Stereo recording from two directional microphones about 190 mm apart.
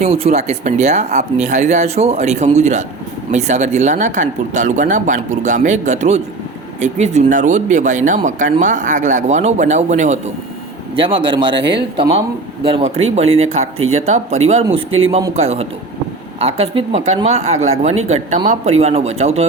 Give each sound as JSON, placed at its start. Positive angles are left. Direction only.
{"t": 0.0, "sound": "speech", "side_deg": -30}
{"t": 10.9, "sound": "a man's voice", "side_deg": -25}
{"t": 12.6, "sound": "speech", "side_deg": -30}
{"t": 14.8, "sound": "speech", "side_deg": -90}
{"t": 15.4, "sound": "speech", "side_deg": -35}